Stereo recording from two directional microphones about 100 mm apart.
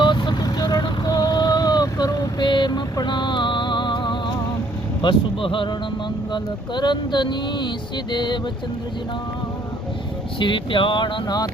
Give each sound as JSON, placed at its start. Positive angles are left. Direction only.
{"t": 0.0, "sound": "vehicle", "side_deg": 50}
{"t": 5.0, "sound": "speech", "side_deg": 55}
{"t": 10.4, "sound": "speech", "side_deg": 55}